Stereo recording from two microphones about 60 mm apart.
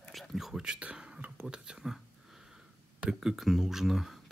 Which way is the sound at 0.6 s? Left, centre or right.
Centre.